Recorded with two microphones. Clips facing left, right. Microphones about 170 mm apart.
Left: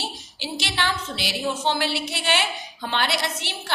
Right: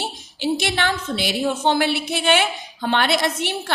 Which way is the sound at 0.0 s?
55° right (ahead or behind).